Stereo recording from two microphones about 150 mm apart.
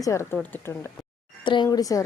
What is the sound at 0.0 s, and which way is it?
Speech, 20° left (ahead or behind).